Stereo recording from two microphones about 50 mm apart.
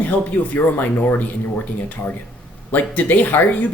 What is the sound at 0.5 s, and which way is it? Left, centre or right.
Speech, left.